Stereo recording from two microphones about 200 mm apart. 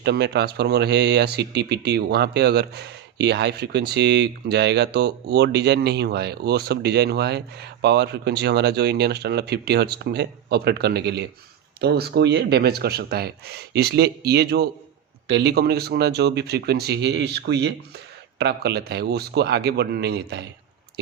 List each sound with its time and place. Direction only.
0.0 s speech: 55° right (ahead or behind)